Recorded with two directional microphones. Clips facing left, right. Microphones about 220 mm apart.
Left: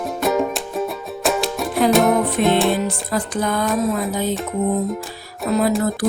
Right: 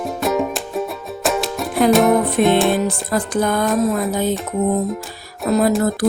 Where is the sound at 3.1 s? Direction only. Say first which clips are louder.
Right 3 dB; 50° right (ahead or behind).